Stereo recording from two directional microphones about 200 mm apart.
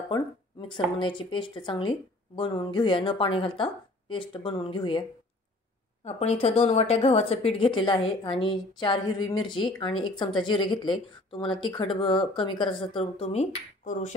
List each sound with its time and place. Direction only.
0.1 s a woman's voice: 25° left (ahead or behind)
6.0 s a woman's voice: 30° left (ahead or behind)